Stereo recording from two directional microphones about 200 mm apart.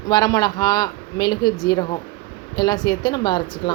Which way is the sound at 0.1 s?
20° left (ahead or behind).